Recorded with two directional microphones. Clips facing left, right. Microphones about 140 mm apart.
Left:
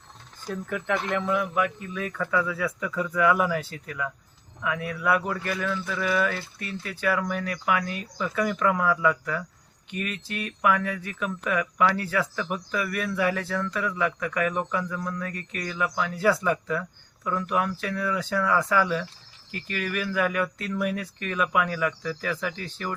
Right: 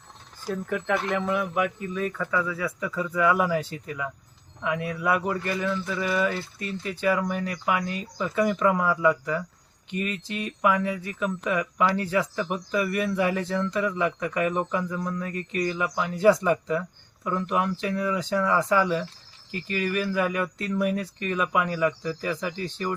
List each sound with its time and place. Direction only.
0.4 s speech: centre (ahead or behind)
10.4 s speech: 10° right (ahead or behind)